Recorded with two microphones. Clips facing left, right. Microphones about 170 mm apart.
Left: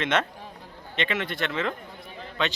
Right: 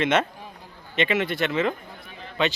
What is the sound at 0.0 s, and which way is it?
Speech, 5° right (ahead or behind).